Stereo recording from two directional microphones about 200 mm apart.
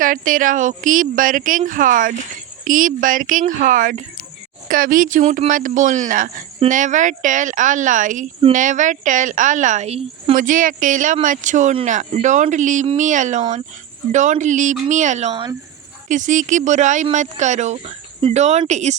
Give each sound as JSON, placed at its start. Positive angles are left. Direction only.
{"t": 0.0, "sound": "a woman's voice", "side_deg": -40}
{"t": 16.0, "sound": "a woman's voice", "side_deg": -40}